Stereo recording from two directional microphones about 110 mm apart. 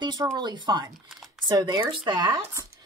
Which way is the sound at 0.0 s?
40° right (ahead or behind).